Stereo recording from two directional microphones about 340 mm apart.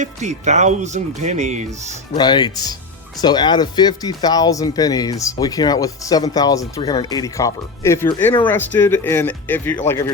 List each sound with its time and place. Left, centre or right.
0.0 s speech: centre
2.1 s speech: centre